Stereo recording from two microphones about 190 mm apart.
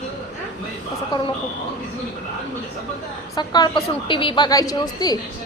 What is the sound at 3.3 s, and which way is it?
A woman's voice, 20° left (ahead or behind).